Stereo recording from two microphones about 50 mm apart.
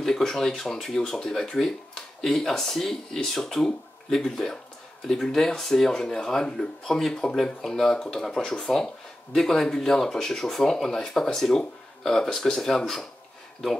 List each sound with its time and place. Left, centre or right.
0.0 s speech: centre